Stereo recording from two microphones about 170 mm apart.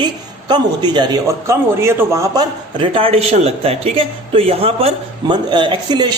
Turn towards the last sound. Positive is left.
turn(degrees=-25)  # may be behind; listen again after turning